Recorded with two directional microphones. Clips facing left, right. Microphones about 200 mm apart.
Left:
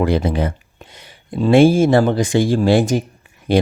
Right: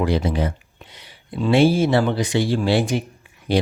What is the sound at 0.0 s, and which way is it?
Speech, 55° left (ahead or behind).